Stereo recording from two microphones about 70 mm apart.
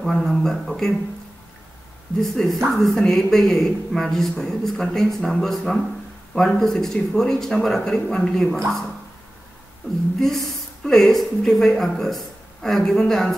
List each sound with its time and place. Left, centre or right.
0.0 s speech: centre
2.1 s speech: centre
10.1 s speech: centre